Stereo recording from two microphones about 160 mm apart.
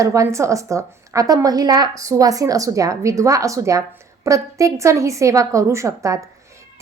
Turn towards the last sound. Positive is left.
turn(degrees=-20)  # may be behind; listen again after turning